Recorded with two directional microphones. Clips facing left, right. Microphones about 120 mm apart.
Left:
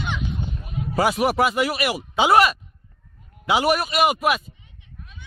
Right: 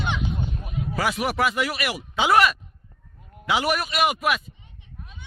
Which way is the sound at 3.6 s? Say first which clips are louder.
Left 4 dB; 35° left (ahead or behind).